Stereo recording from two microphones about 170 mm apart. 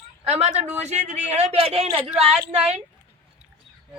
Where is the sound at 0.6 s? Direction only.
40° right (ahead or behind).